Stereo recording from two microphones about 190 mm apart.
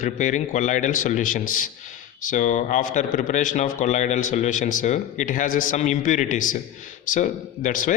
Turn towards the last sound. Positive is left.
turn(degrees=45)  # may be behind; listen again after turning